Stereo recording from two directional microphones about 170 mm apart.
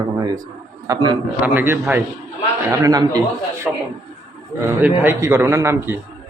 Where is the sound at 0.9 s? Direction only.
20° right (ahead or behind).